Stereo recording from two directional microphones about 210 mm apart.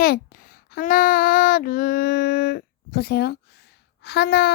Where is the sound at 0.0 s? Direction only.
45° left (ahead or behind).